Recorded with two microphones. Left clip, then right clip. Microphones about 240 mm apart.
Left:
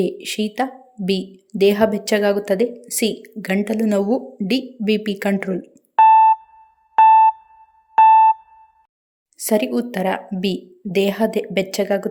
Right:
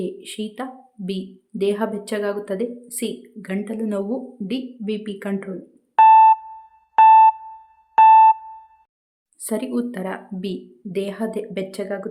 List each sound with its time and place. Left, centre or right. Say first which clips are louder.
0.0 s a woman's voice: left 7 dB; centre
6.0 s a sound: even; centre
6.9 s music: even; centre
9.4 s a woman's voice: left 6 dB; centre